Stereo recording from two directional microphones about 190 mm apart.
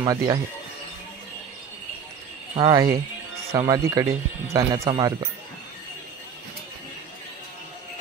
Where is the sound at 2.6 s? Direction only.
20° right (ahead or behind).